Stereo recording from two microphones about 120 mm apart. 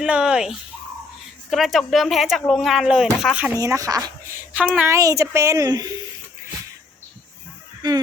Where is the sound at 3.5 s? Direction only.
25° right (ahead or behind).